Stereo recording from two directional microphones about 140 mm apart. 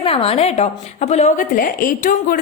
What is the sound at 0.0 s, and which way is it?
A woman's voice, 40° left (ahead or behind).